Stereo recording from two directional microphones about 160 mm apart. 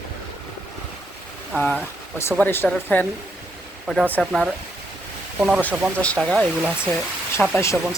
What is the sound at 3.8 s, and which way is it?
Speech, 5° right (ahead or behind).